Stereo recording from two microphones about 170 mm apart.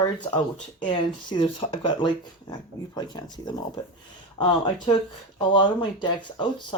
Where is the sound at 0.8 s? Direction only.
30° left (ahead or behind).